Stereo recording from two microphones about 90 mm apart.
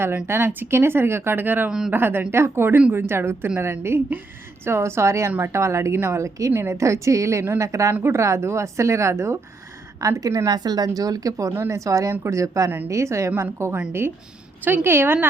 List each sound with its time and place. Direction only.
0.3 s a woman's voice: 25° right (ahead or behind); by 11.5 s 40° right (ahead or behind)
11.5 s a woman's voice: 30° right (ahead or behind)